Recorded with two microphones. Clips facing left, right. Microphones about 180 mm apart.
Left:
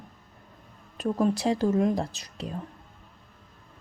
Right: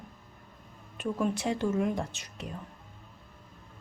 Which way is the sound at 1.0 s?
40° left (ahead or behind).